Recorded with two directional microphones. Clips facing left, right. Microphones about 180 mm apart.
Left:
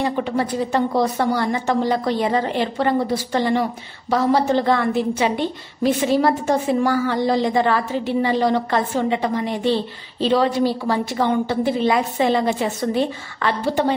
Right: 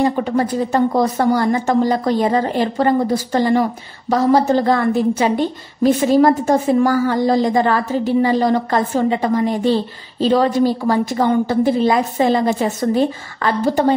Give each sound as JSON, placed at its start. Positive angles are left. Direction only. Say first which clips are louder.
{"t": 0.0, "sound": "a woman's voice", "louder": "right 4 dB", "side_deg": -45}